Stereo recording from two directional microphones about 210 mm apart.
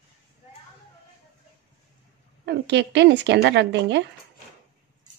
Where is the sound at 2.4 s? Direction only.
55° right (ahead or behind).